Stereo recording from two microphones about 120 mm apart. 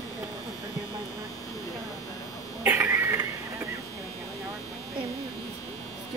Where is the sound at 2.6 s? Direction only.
20° right (ahead or behind).